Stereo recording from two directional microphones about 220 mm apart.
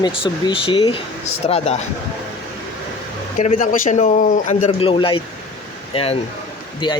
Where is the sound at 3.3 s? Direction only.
35° left (ahead or behind).